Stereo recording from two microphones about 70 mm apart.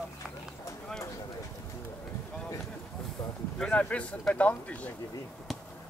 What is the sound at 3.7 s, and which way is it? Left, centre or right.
Speech, centre.